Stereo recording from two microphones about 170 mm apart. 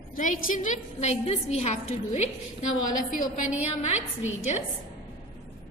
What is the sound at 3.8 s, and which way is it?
Speech, 40° left (ahead or behind).